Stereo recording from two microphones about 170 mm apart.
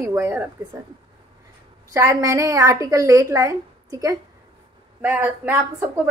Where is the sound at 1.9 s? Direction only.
20° right (ahead or behind).